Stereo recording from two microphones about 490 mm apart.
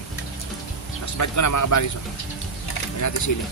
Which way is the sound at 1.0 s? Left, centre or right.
Left.